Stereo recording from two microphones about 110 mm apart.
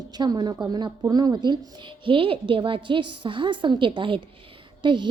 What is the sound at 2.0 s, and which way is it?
A woman's voice, 55° right (ahead or behind).